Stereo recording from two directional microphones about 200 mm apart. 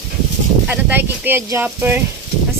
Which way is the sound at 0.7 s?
10° right (ahead or behind).